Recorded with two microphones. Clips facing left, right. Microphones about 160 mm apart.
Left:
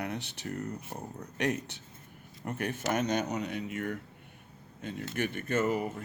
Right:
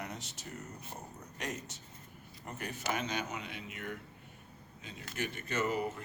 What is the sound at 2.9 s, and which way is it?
Speech, 45° left (ahead or behind).